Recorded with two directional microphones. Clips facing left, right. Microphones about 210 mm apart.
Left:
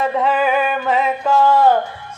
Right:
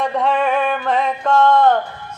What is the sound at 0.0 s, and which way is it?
Music, 5° left (ahead or behind).